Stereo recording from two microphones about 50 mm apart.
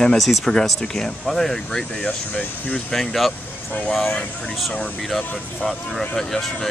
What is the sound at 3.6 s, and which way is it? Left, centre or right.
Speech, left.